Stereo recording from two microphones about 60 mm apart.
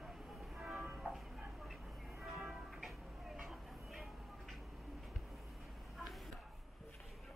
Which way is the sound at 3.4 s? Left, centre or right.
Centre.